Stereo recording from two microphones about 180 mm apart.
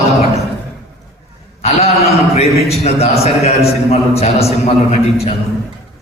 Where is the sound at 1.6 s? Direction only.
35° left (ahead or behind).